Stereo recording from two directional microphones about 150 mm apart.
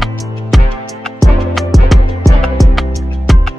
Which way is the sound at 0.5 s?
Centre (ahead or behind).